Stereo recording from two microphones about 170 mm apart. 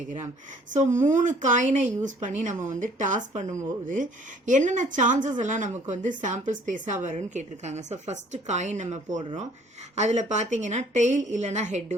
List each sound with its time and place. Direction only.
0.7 s a woman's voice: 45° right (ahead or behind)
4.4 s a woman's voice: 45° right (ahead or behind)